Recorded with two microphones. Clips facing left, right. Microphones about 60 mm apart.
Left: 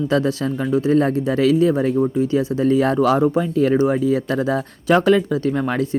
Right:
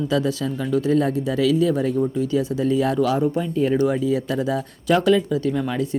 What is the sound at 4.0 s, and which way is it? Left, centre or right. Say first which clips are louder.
Speech: left 3 dB; left.